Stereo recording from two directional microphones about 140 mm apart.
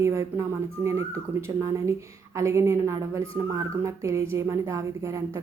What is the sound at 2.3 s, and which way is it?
Speech, 20° right (ahead or behind).